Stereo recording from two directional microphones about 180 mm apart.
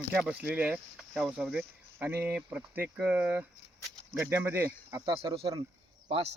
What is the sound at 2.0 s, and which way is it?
Speech, 10° right (ahead or behind).